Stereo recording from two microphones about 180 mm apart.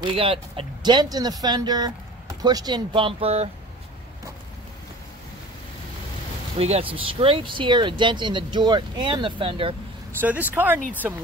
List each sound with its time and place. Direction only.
0.0 s speech: 30° right (ahead or behind)
6.6 s speech: 30° right (ahead or behind)
10.2 s speech: 10° right (ahead or behind)